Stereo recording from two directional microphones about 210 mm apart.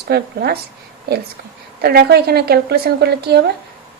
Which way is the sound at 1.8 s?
50° right (ahead or behind).